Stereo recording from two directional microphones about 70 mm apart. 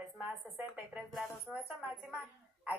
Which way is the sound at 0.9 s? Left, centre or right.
Centre.